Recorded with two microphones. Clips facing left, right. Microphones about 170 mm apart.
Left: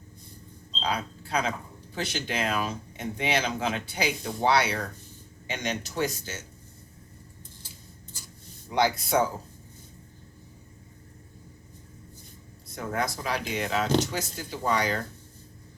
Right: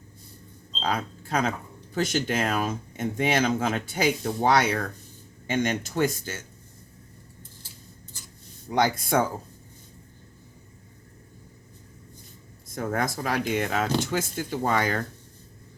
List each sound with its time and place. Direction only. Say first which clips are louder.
0.8 s speech: right 2 dB; 45° right (ahead or behind)
8.7 s speech: right 1 dB; 50° right (ahead or behind)
12.6 s speech: right 3 dB; 50° right (ahead or behind)